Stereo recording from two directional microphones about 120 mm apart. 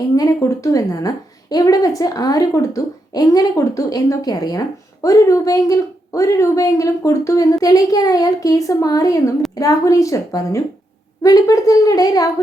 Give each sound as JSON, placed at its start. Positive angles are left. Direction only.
{"t": 0.2, "sound": "a woman's voice", "side_deg": 25}